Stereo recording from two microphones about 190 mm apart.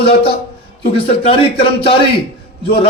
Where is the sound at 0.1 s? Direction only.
30° left (ahead or behind).